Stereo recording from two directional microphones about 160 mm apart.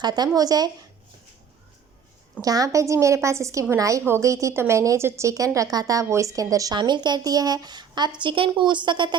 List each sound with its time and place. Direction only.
0.0 s a woman's voice: 25° right (ahead or behind)
2.4 s a woman's voice: 20° right (ahead or behind)